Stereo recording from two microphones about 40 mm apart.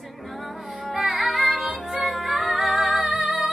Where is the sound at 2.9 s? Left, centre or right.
Right.